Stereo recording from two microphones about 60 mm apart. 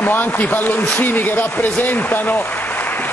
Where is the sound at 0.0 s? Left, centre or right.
Left.